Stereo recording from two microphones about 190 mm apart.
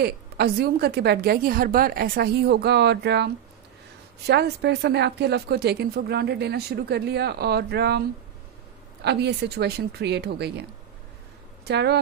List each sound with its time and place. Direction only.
0.0 s speech: 55° right (ahead or behind)
4.3 s speech: 65° right (ahead or behind)
9.0 s speech: 60° right (ahead or behind)